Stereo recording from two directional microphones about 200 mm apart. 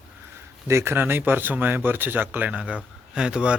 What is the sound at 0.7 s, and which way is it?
Speech, 15° right (ahead or behind).